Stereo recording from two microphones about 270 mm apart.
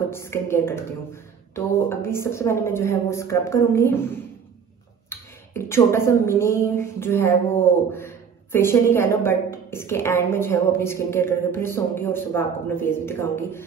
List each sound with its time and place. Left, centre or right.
0.1 s a woman's voice: centre